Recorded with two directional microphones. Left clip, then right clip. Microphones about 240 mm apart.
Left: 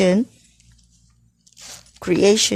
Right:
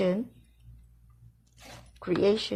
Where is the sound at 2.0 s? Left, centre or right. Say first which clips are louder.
Left 10 dB; left.